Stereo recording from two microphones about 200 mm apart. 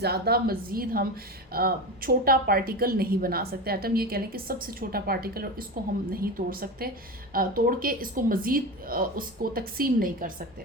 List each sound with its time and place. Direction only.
0.0 s a woman's voice: 50° right (ahead or behind)